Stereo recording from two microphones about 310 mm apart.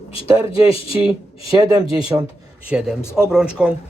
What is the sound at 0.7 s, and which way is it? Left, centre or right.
Speech, centre.